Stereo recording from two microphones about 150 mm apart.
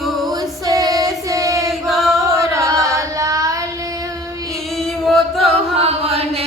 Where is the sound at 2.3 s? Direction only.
20° right (ahead or behind).